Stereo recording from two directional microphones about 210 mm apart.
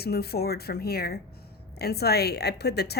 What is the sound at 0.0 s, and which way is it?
A woman's voice, 50° left (ahead or behind).